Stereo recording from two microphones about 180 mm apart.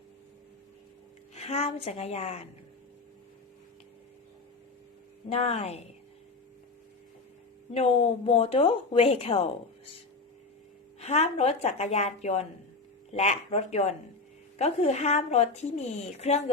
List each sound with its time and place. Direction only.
1.4 s a woman's voice: 35° left (ahead or behind)
5.3 s a woman's voice: 35° left (ahead or behind)
7.7 s a woman's voice: 35° left (ahead or behind)
11.0 s a woman's voice: 35° left (ahead or behind)